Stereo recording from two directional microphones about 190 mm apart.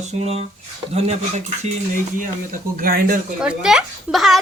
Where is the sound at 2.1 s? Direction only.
45° right (ahead or behind).